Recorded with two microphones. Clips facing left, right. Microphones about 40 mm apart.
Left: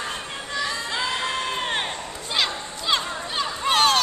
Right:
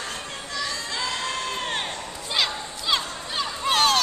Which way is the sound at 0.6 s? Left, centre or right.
Centre.